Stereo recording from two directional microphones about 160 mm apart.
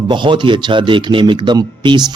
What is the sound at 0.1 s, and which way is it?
Speech, 30° right (ahead or behind).